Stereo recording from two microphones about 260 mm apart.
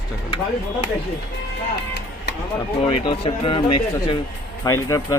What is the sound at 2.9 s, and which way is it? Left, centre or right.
Speech, centre.